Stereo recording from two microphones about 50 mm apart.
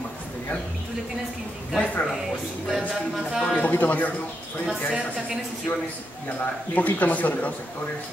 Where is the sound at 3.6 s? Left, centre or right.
Left.